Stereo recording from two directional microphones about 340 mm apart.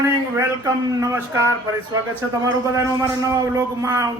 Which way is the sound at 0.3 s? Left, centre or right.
Centre.